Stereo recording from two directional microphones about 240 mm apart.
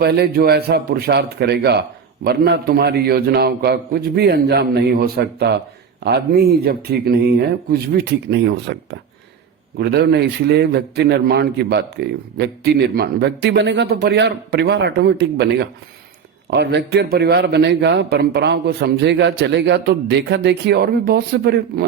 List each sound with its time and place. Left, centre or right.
0.0 s a man's voice: right